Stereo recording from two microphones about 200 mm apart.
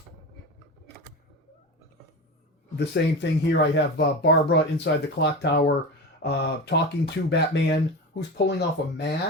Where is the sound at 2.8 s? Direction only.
60° left (ahead or behind).